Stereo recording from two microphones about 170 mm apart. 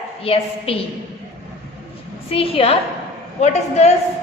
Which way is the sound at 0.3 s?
35° left (ahead or behind).